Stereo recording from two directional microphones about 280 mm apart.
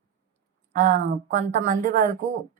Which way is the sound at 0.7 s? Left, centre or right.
Right.